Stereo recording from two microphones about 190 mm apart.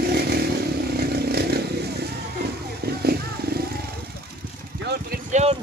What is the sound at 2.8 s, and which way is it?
Vehicle, 55° right (ahead or behind).